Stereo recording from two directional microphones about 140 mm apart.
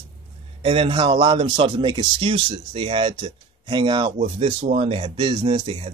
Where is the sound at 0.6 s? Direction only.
40° right (ahead or behind).